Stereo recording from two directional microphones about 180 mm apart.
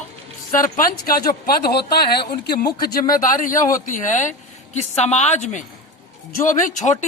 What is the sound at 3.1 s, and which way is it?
Speech, 45° left (ahead or behind).